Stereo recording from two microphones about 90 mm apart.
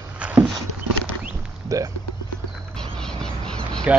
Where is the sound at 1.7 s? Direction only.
40° right (ahead or behind).